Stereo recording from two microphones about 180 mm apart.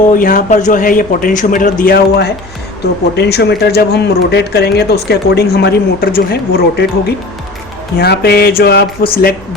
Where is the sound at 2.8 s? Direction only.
65° left (ahead or behind).